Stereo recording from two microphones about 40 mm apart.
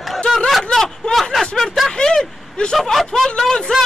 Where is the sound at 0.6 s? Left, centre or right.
Centre.